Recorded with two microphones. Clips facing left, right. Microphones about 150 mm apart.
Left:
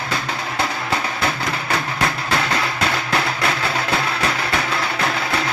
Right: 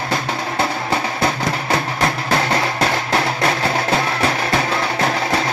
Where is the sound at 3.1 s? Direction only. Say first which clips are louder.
Right 3 dB; 30° right (ahead or behind).